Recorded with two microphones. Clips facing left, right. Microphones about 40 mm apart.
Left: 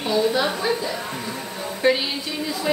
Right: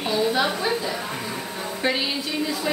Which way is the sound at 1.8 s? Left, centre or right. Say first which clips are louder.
Left 5 dB; centre.